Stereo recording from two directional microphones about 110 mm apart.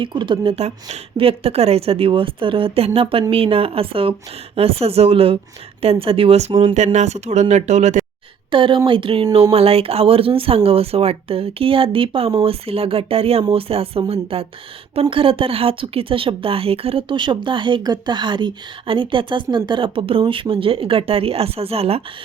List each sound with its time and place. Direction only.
0.0 s speech: 45° right (ahead or behind)
0.5 s speech: 70° right (ahead or behind)
6.7 s speech: 90° right
8.4 s speech: 50° right (ahead or behind)
9.3 s speech: 60° right (ahead or behind)